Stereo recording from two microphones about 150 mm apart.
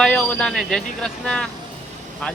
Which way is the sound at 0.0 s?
5° left (ahead or behind).